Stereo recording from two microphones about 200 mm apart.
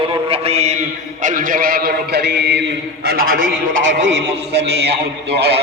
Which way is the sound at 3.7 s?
70° right (ahead or behind).